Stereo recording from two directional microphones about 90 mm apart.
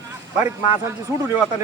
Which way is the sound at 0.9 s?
30° right (ahead or behind).